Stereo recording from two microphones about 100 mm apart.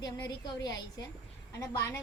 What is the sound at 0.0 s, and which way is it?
A woman's voice, 45° left (ahead or behind).